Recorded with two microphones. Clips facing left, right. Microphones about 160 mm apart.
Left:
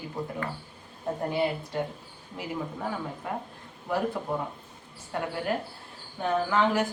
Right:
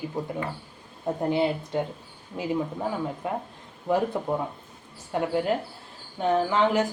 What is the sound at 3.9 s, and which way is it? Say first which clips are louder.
Speech: right 5 dB; 20° right (ahead or behind).